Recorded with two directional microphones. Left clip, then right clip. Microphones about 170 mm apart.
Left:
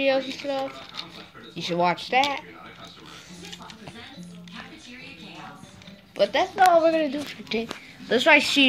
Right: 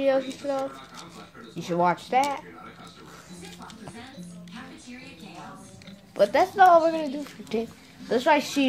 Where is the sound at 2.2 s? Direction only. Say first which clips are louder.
Left 3 dB; 5° left (ahead or behind).